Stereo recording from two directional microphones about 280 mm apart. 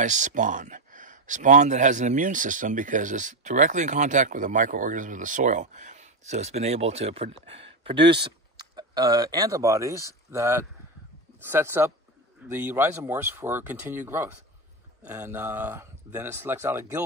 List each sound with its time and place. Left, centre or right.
0.0 s speech: right; by 16.8 s centre